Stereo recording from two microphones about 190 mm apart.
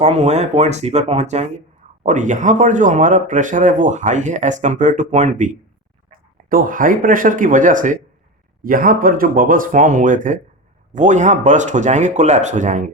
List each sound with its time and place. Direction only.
0.0 s speech: 35° right (ahead or behind)
6.5 s speech: 45° right (ahead or behind)